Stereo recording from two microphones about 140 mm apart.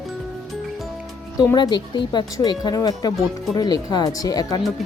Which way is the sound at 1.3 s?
30° left (ahead or behind).